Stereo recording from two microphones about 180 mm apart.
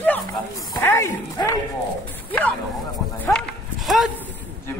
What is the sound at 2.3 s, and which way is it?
Speech, 5° left (ahead or behind).